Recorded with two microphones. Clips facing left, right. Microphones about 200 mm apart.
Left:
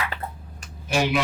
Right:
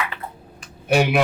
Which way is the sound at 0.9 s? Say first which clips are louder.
Right 5 dB; 60° right (ahead or behind).